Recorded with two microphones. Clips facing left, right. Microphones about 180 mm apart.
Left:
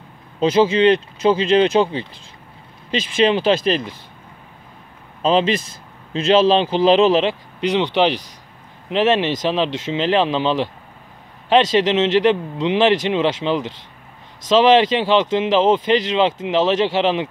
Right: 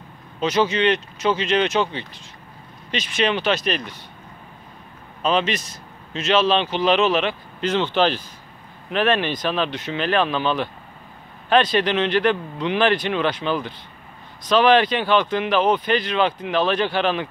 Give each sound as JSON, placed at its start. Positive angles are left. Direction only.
{"t": 0.4, "sound": "speech", "side_deg": 30}
{"t": 5.2, "sound": "speech", "side_deg": 30}
{"t": 7.6, "sound": "speech", "side_deg": 15}